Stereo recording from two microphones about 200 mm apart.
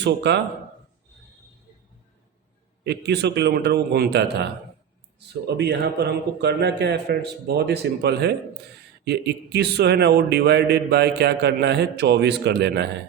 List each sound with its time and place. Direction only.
0.0 s speech: 60° right (ahead or behind)
2.8 s speech: 60° right (ahead or behind)
5.5 s speech: 55° right (ahead or behind)